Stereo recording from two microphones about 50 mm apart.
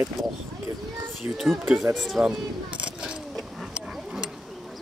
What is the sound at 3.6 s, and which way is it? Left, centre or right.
Dog, centre.